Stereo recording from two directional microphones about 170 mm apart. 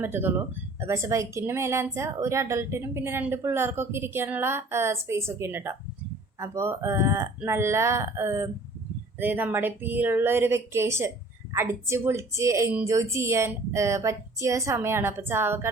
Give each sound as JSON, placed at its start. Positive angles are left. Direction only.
{"t": 0.0, "sound": "a woman's voice", "side_deg": -10}